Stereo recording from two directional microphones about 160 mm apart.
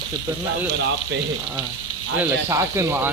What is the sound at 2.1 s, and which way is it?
Speech, 20° right (ahead or behind).